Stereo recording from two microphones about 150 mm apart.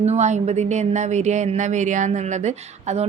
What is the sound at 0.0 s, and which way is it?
A woman's voice, 50° right (ahead or behind).